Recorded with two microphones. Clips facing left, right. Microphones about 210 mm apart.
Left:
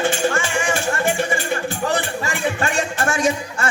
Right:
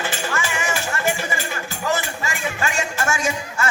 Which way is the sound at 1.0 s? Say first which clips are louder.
Left 1 dB; 50° left (ahead or behind).